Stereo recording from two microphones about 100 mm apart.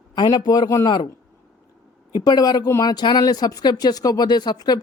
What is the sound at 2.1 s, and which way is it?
Speech, 40° left (ahead or behind).